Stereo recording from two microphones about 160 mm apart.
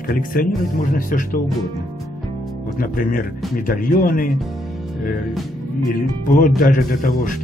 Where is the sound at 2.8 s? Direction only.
60° left (ahead or behind).